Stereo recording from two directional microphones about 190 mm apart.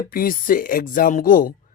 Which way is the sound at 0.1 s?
50° left (ahead or behind).